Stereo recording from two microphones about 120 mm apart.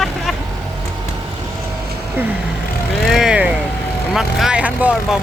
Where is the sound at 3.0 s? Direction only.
5° right (ahead or behind).